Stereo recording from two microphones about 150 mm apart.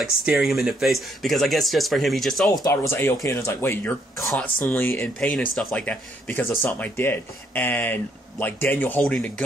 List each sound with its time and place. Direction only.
0.0 s speech: 5° right (ahead or behind)
2.5 s speech: 20° left (ahead or behind)
4.2 s speech: centre (ahead or behind)
4.6 s speech: 10° left (ahead or behind)